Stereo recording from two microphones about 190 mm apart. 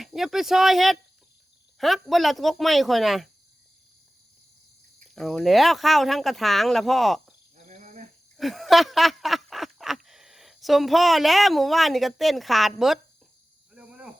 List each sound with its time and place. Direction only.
0.0 s speech: centre (ahead or behind)
5.1 s speech: centre (ahead or behind)
7.6 s cricket: 40° right (ahead or behind)
8.4 s a sound: centre (ahead or behind)
13.7 s cricket: 5° right (ahead or behind)